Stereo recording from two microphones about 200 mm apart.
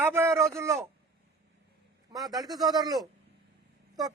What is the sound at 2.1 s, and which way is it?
A man's voice, 20° right (ahead or behind).